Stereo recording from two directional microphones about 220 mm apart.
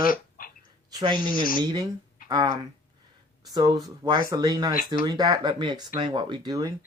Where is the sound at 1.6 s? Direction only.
20° right (ahead or behind).